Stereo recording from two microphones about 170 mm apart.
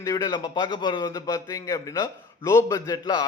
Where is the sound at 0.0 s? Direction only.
20° left (ahead or behind).